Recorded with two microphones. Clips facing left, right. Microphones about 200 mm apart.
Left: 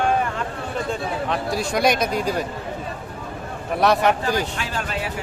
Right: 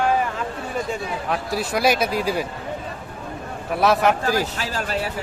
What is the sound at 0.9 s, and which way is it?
Speech, 5° right (ahead or behind).